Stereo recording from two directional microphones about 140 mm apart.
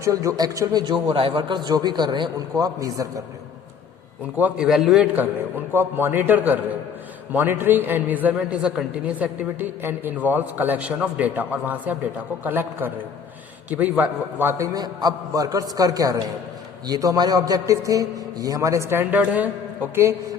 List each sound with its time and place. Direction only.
0.0 s a man's voice: 25° right (ahead or behind)
4.4 s a man's voice: 10° right (ahead or behind)
5.7 s a man's voice: 15° right (ahead or behind)
14.7 s a man's voice: 25° right (ahead or behind)